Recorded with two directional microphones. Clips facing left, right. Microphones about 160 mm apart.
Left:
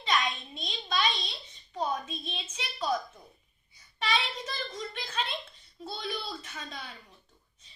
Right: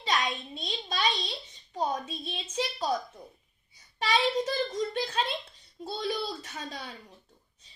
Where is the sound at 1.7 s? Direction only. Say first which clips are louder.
Right 1 dB; 40° right (ahead or behind).